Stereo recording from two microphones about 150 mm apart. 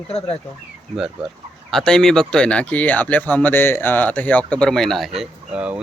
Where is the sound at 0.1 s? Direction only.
40° left (ahead or behind).